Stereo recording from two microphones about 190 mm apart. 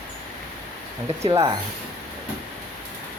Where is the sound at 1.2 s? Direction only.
15° right (ahead or behind).